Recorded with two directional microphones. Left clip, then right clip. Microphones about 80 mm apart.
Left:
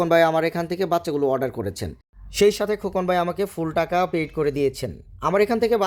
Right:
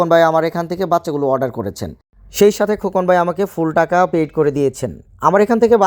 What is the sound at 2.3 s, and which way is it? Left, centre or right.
Speech, right.